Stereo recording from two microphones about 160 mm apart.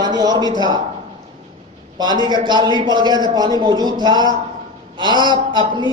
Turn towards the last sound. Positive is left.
turn(degrees=-30)  # may be behind; listen again after turning